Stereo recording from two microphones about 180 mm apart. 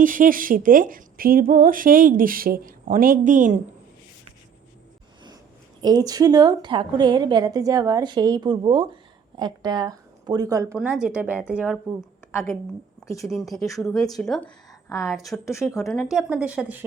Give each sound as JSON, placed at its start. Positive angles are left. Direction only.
{"t": 0.0, "sound": "a woman's voice", "side_deg": -50}
{"t": 5.8, "sound": "a woman's voice", "side_deg": -20}
{"t": 10.8, "sound": "speech", "side_deg": -5}
{"t": 12.3, "sound": "a woman's voice", "side_deg": 15}
{"t": 13.2, "sound": "speech", "side_deg": 0}
{"t": 14.7, "sound": "a sound", "side_deg": 15}
{"t": 15.0, "sound": "speech", "side_deg": 0}
{"t": 15.4, "sound": "speech", "side_deg": 15}
{"t": 15.9, "sound": "speech", "side_deg": 0}